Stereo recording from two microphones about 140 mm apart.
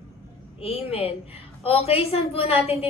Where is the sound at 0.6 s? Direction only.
45° left (ahead or behind).